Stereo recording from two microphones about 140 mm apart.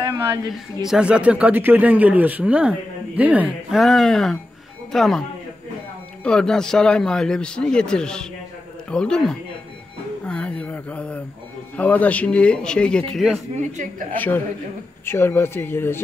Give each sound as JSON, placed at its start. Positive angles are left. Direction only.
{"t": 0.0, "sound": "a sound", "side_deg": -30}
{"t": 0.8, "sound": "a man's voice", "side_deg": -5}
{"t": 3.8, "sound": "a man's voice", "side_deg": 0}
{"t": 6.2, "sound": "a man's voice", "side_deg": 5}
{"t": 14.1, "sound": "speech", "side_deg": 10}